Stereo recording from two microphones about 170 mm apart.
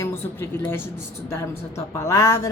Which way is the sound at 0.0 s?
15° left (ahead or behind).